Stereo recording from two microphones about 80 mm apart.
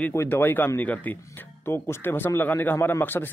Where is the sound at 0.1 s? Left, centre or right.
Left.